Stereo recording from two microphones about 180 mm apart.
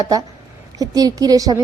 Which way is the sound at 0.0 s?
20° right (ahead or behind).